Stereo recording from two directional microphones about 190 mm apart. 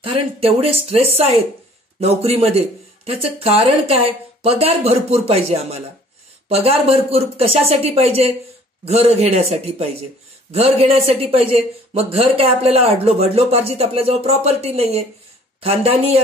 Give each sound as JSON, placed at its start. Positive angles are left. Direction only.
{"t": 0.0, "sound": "speech", "side_deg": -30}